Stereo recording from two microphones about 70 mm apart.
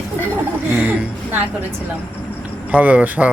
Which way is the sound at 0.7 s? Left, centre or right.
Right.